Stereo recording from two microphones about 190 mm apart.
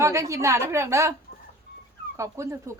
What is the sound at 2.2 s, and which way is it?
Speech, 15° right (ahead or behind).